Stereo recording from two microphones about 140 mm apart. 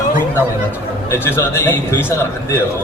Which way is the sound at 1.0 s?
15° left (ahead or behind).